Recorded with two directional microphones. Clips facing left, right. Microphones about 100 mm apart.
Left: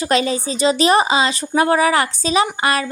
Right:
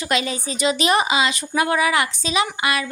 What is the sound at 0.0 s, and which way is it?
A woman's voice, 35° left (ahead or behind).